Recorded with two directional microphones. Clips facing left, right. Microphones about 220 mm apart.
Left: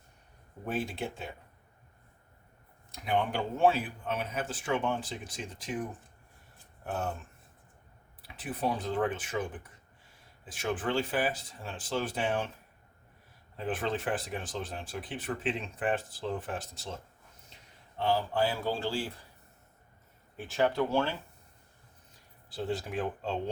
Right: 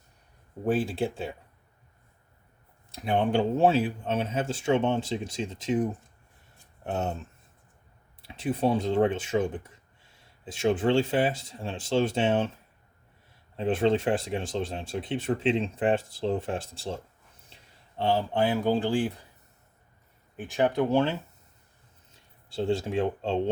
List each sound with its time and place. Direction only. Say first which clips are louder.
0.6 s speech: right 8 dB; 30° right (ahead or behind)
2.9 s speech: right 6 dB; 30° right (ahead or behind)
6.8 s speech: right 4 dB; 25° right (ahead or behind)
8.2 s speech: right 7 dB; 25° right (ahead or behind)
13.6 s speech: right 9 dB; 25° right (ahead or behind)
20.3 s speech: right 3 dB; 15° right (ahead or behind)